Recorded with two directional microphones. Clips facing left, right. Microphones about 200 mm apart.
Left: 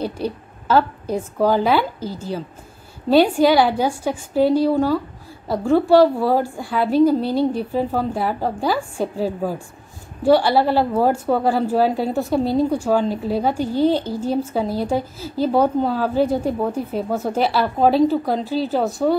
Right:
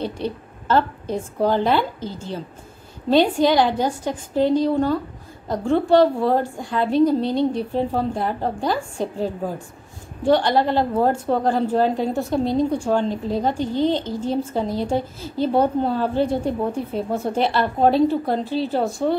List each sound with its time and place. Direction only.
0.0 s a woman's voice: 5° left (ahead or behind)